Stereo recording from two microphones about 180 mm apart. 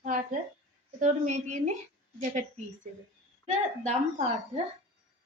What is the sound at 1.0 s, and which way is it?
A woman's voice, 40° right (ahead or behind).